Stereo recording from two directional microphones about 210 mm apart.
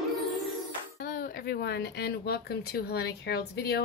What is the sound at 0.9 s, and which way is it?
Speech, 45° left (ahead or behind).